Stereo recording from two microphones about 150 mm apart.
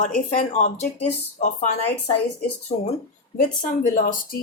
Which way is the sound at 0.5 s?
45° left (ahead or behind).